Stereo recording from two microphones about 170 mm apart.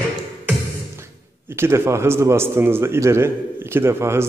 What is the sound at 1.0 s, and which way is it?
A man's voice, 15° right (ahead or behind).